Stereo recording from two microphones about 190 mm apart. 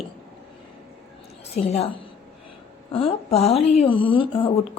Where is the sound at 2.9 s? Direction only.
30° left (ahead or behind).